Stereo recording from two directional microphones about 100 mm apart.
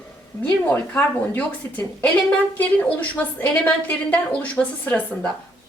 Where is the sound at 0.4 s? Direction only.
15° left (ahead or behind).